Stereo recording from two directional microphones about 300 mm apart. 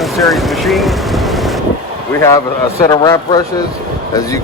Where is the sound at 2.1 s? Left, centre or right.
Centre.